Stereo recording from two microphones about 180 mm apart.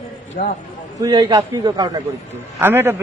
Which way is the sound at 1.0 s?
25° right (ahead or behind).